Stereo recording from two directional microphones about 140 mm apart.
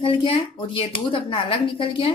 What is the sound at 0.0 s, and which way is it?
Speech, 40° left (ahead or behind).